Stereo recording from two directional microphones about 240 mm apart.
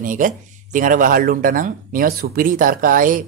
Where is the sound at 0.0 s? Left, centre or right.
Right.